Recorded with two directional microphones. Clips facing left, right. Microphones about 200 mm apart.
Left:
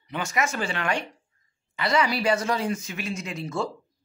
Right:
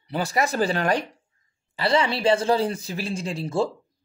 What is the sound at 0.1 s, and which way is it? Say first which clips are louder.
Speech: right 4 dB; 35° right (ahead or behind).